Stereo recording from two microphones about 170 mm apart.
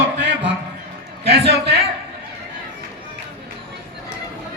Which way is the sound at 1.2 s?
80° right.